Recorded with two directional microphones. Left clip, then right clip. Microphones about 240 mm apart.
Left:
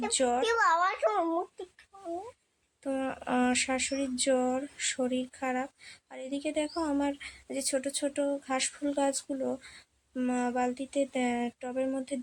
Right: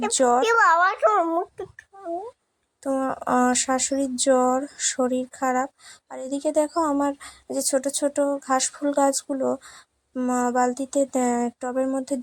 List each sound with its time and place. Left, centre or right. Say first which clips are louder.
0.0 s speech: right 9 dB; right
2.8 s speech: right 9 dB; centre